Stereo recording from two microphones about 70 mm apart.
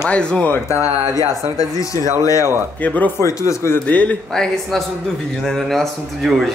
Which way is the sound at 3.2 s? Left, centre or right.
Left.